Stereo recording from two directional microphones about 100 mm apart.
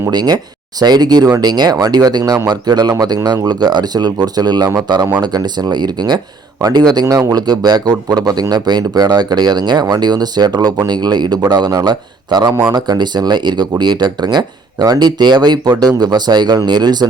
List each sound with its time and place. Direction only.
0.1 s speech: 45° right (ahead or behind)